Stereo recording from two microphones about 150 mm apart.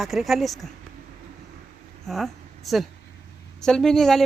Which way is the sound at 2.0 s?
Centre (ahead or behind).